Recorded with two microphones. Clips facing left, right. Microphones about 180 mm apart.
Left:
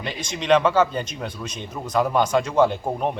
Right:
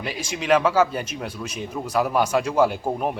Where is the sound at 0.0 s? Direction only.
5° right (ahead or behind).